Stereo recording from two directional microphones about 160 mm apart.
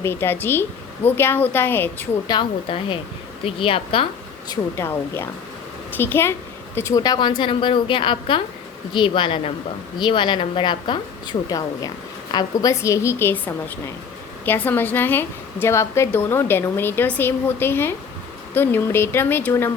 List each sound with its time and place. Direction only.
0.0 s a woman's voice: 15° left (ahead or behind)
2.2 s a woman's voice: 30° left (ahead or behind)
4.4 s a woman's voice: 20° left (ahead or behind)